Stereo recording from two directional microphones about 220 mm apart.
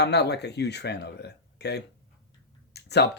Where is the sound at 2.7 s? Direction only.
50° left (ahead or behind).